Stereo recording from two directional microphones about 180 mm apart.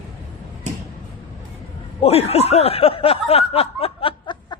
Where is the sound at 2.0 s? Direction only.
35° left (ahead or behind).